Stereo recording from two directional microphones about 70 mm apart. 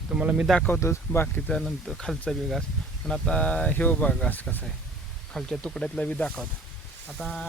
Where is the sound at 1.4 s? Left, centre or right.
Centre.